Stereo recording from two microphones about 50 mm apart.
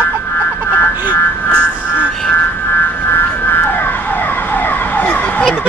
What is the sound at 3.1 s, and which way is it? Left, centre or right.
Ambulance, left.